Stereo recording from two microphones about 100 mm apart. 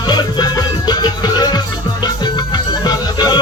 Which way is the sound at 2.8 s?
45° left (ahead or behind).